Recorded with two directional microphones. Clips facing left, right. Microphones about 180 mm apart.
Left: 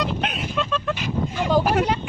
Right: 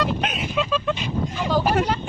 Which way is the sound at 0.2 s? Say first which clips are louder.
Right 1 dB; 5° right (ahead or behind).